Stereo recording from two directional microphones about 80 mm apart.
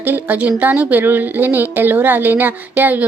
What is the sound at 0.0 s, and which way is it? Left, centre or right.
Speech, right.